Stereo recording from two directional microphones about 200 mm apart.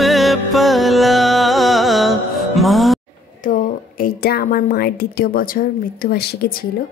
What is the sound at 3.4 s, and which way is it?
A woman's voice, 45° left (ahead or behind).